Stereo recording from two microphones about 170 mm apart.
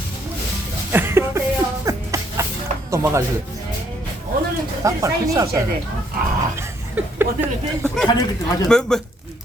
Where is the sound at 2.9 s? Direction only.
15° right (ahead or behind).